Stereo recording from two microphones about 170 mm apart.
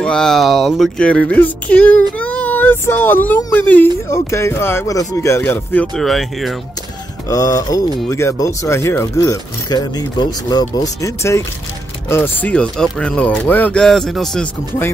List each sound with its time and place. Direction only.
0.0 s speech: 5° left (ahead or behind)
7.2 s speech: 20° left (ahead or behind); by 14.5 s centre (ahead or behind)